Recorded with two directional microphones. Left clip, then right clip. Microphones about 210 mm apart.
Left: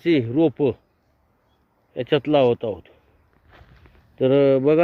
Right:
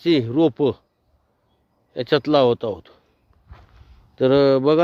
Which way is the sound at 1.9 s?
20° right (ahead or behind).